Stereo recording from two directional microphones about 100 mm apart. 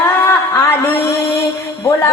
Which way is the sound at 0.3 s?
25° left (ahead or behind).